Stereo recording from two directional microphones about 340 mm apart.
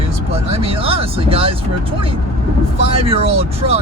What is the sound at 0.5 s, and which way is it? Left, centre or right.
Speech, centre.